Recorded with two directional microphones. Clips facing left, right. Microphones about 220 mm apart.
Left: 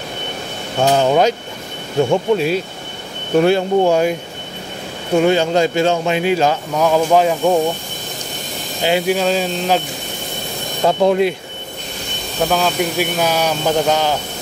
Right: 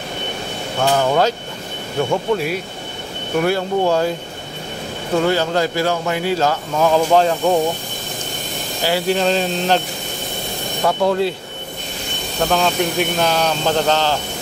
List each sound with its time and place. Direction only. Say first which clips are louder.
0.9 s speech: left 3 dB; 20° left (ahead or behind)
6.7 s speech: right 1 dB; 5° left (ahead or behind)
8.8 s speech: left 3 dB; 20° left (ahead or behind)
9.1 s speech: even; 5° left (ahead or behind)
10.8 s speech: left 3 dB; 20° left (ahead or behind)
12.4 s speech: left 1 dB; 5° left (ahead or behind)